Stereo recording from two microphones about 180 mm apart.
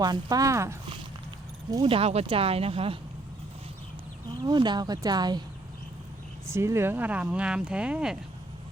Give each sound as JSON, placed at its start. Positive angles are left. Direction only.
{"t": 0.0, "sound": "speech", "side_deg": -20}
{"t": 1.7, "sound": "speech", "side_deg": -30}
{"t": 4.4, "sound": "speech", "side_deg": -25}
{"t": 6.5, "sound": "speech", "side_deg": -15}